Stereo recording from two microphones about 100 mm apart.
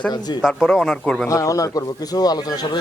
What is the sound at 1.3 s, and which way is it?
Speech, 35° left (ahead or behind).